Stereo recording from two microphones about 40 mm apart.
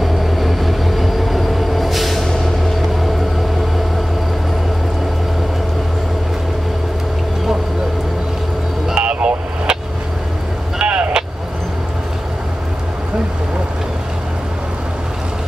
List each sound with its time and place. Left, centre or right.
0.0 s train: centre
8.9 s vehicle: right
10.8 s vehicle: right